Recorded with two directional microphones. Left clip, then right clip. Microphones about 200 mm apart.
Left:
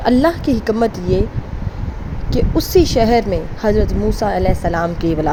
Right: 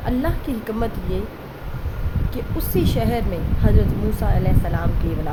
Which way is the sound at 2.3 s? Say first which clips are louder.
Left 11 dB; 35° left (ahead or behind).